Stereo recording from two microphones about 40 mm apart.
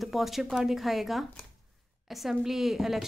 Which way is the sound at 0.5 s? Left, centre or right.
Centre.